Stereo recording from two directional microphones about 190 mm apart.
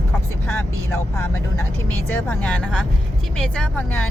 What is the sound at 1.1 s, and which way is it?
Speech, 15° left (ahead or behind).